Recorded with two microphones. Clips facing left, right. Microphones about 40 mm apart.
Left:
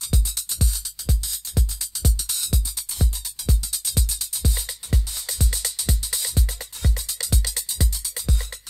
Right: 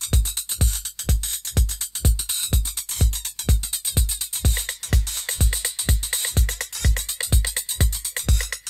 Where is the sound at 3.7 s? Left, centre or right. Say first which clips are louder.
Even; right.